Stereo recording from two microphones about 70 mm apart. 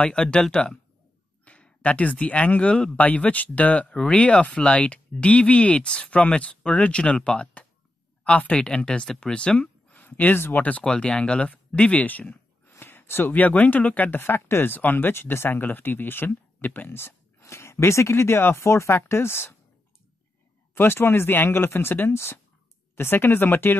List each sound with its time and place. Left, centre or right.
0.0 s speech: centre
10.0 s speech: left
12.7 s a sound: left
13.3 s speech: left
20.7 s speech: left